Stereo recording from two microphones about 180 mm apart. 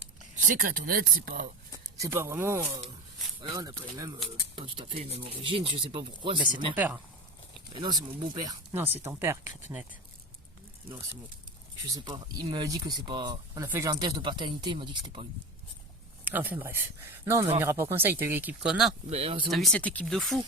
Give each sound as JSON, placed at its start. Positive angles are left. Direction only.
{"t": 0.3, "sound": "speech", "side_deg": -50}
{"t": 1.7, "sound": "speech", "side_deg": -15}
{"t": 6.7, "sound": "speech", "side_deg": -10}
{"t": 7.7, "sound": "speech", "side_deg": -25}
{"t": 11.9, "sound": "speech", "side_deg": -25}
{"t": 16.2, "sound": "speech", "side_deg": -10}
{"t": 19.1, "sound": "speech", "side_deg": -35}
{"t": 19.5, "sound": "speech", "side_deg": 0}